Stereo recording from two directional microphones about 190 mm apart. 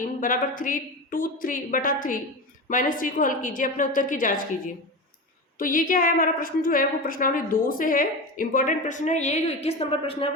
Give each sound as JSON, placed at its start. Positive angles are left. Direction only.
{"t": 0.2, "sound": "a woman's voice", "side_deg": 45}
{"t": 5.5, "sound": "a woman's voice", "side_deg": 45}